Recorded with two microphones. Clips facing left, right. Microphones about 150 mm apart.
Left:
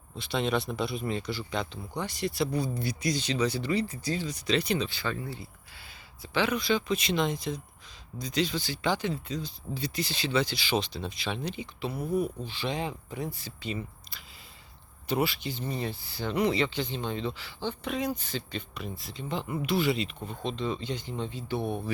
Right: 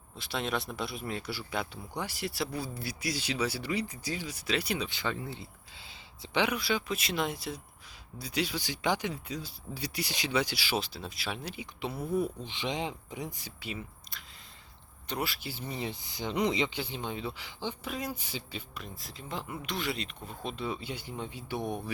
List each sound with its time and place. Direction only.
0.2 s speech: centre (ahead or behind)
4.9 s speech: 20° right (ahead or behind)
11.9 s speech: 15° left (ahead or behind)
12.5 s speech: 20° right (ahead or behind)
17.8 s speech: centre (ahead or behind)